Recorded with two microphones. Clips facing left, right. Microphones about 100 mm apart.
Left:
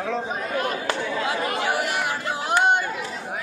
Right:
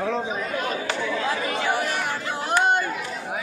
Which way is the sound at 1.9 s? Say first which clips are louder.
Left 1 dB; 90° left.